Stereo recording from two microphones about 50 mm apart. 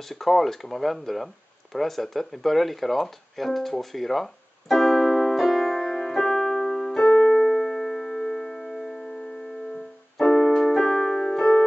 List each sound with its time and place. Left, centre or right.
0.1 s a sound: centre
7.0 s music: left
7.3 s music: centre
10.2 s keyboard: centre